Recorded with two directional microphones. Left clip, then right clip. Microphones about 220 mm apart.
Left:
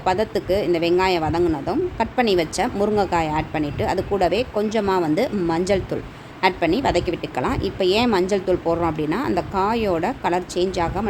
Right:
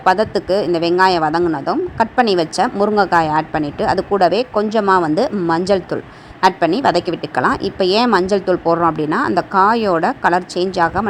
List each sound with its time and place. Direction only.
0.0 s speech: 15° right (ahead or behind)